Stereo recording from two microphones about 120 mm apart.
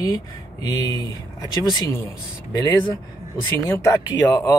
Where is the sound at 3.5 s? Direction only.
25° left (ahead or behind).